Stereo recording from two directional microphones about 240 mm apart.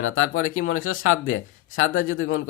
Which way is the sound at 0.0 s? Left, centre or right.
Left.